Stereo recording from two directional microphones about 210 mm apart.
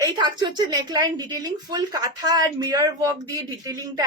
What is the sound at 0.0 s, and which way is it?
A woman's voice, 20° right (ahead or behind).